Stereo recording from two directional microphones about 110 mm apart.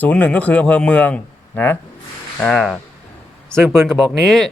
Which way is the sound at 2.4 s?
5° left (ahead or behind).